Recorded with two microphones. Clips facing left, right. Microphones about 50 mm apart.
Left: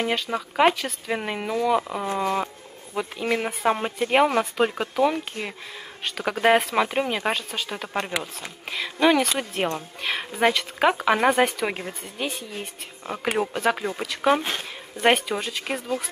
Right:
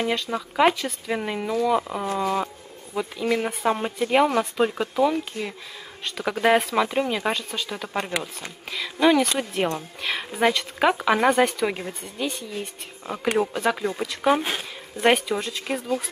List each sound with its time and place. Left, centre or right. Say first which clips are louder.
0.0 s speech: even; centre
2.4 s a sound: right 1 dB; centre
3.2 s speech: right 1 dB; left
4.9 s speech: right 1 dB; centre
6.2 s speech: even; centre
8.6 s speech: right 1 dB; centre
14.2 s speech: even; centre
15.0 s speech: even; centre